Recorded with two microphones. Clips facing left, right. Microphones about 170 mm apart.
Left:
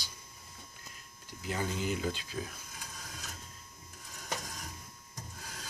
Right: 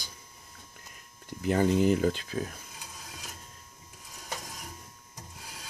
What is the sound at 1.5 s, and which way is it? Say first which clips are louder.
Speech: right 11 dB; 55° right (ahead or behind).